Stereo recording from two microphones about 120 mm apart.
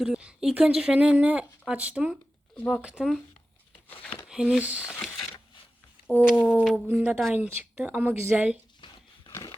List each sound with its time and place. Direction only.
0.0 s speech: 10° right (ahead or behind)
2.6 s speech: 5° left (ahead or behind)
2.8 s speech: 5° right (ahead or behind)
4.3 s speech: 5° right (ahead or behind)
6.4 s speech: 5° right (ahead or behind)
8.8 s pig: 45° left (ahead or behind)